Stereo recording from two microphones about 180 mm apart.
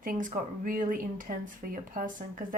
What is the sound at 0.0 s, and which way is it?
Speech, 50° right (ahead or behind).